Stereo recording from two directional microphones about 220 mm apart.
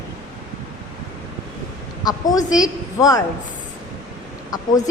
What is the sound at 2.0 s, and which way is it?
A woman's voice, 15° left (ahead or behind).